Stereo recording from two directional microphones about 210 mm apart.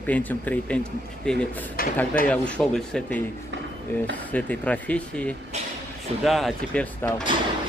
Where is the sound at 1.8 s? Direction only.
45° left (ahead or behind).